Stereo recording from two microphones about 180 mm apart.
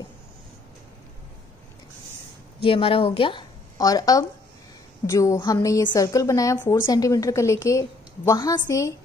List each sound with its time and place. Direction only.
2.6 s a woman's voice: 30° left (ahead or behind)